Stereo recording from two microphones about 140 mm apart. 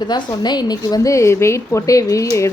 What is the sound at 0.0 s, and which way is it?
A woman's voice, 30° left (ahead or behind).